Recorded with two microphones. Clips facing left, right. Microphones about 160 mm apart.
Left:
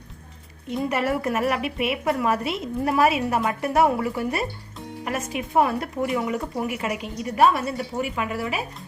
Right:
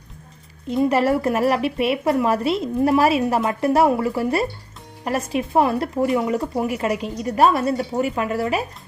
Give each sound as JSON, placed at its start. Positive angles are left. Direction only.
{"t": 0.9, "sound": "a woman's voice", "side_deg": -35}